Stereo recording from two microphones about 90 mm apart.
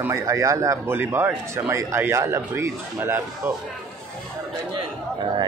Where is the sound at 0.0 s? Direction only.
35° right (ahead or behind).